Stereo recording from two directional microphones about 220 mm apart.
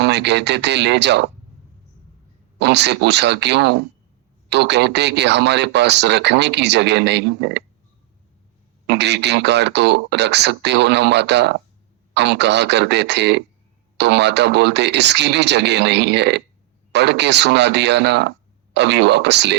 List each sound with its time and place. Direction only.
0.0 s speech: 50° right (ahead or behind)
2.6 s speech: 50° right (ahead or behind)
8.9 s speech: 50° right (ahead or behind)